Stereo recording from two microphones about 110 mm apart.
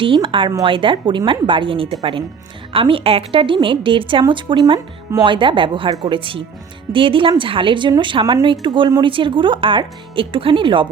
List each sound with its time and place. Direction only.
0.0 s a woman's voice: 50° right (ahead or behind)